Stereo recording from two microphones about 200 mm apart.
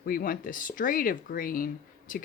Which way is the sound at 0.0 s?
45° left (ahead or behind).